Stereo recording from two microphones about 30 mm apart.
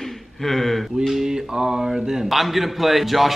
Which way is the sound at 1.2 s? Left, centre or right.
Right.